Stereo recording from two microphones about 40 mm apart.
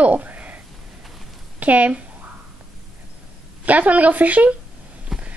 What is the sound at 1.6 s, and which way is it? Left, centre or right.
Speech, right.